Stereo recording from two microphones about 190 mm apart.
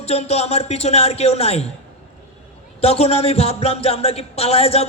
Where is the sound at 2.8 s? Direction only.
30° left (ahead or behind).